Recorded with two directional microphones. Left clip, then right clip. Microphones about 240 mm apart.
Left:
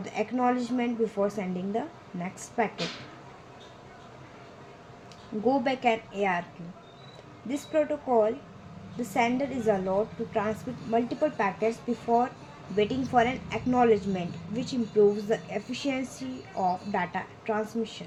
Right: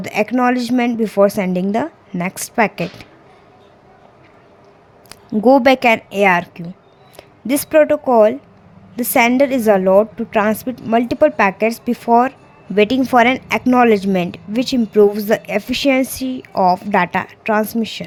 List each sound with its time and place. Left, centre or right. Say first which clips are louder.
0.0 s speech: right 12 dB; right
5.0 s speech: right 15 dB; right
7.4 s speech: right 15 dB; right